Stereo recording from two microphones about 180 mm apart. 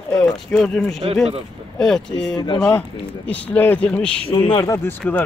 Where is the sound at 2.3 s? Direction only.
25° left (ahead or behind).